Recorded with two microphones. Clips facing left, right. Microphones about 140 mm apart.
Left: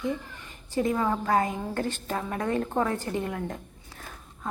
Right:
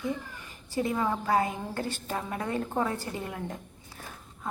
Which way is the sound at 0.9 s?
10° right (ahead or behind).